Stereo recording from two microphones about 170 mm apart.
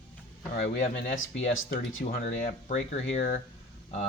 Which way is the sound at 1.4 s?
45° left (ahead or behind).